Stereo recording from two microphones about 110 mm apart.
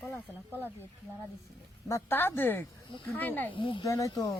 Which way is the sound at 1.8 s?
25° left (ahead or behind).